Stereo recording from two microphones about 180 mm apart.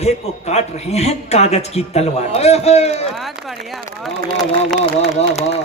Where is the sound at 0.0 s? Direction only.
35° left (ahead or behind).